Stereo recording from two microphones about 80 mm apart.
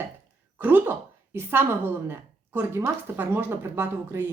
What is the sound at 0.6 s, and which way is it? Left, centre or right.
A woman's voice, right.